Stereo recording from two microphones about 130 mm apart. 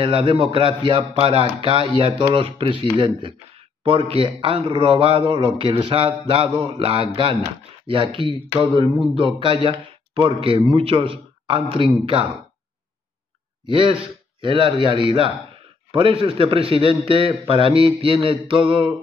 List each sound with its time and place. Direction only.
0.0 s speech: 45° right (ahead or behind)
13.7 s speech: 40° right (ahead or behind)